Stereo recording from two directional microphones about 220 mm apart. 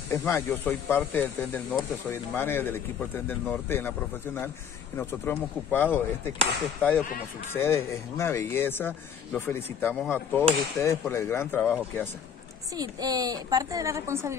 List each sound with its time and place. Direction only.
0.1 s speech: 15° left (ahead or behind)
12.7 s a woman's voice: 15° right (ahead or behind)